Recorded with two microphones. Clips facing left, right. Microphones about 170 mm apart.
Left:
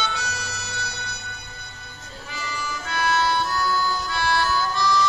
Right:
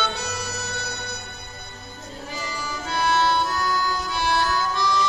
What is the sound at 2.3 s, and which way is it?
Music, 30° right (ahead or behind).